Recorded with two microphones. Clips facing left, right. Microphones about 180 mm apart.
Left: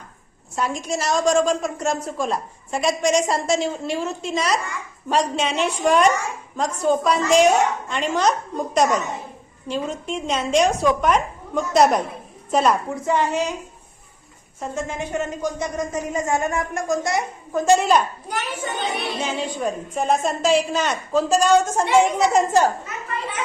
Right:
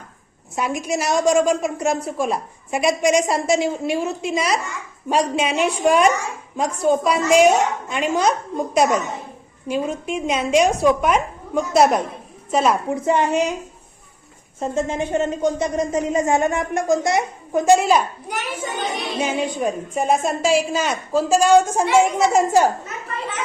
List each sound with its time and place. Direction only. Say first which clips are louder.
0.5 s a woman's voice: right 2 dB; 10° right (ahead or behind)
12.9 s speech: right 3 dB; 20° right (ahead or behind)
14.6 s a woman's voice: right 5 dB; 25° right (ahead or behind); by 22.7 s 10° right (ahead or behind)